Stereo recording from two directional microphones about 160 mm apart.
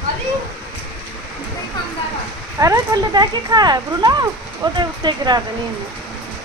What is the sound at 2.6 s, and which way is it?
Speech, 20° right (ahead or behind).